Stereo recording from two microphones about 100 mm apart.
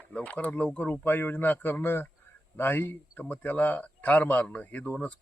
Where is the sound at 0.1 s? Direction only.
15° left (ahead or behind).